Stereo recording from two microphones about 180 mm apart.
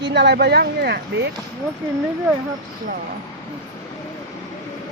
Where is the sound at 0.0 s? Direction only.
70° right (ahead or behind).